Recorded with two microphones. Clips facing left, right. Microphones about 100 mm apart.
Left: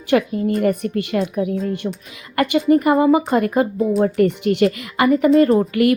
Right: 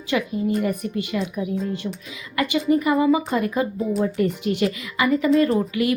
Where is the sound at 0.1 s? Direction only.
55° left (ahead or behind).